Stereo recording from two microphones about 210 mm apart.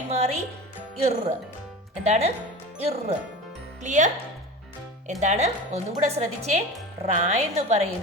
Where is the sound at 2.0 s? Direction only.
30° right (ahead or behind).